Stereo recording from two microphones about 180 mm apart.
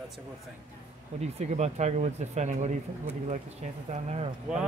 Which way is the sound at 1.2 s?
40° right (ahead or behind).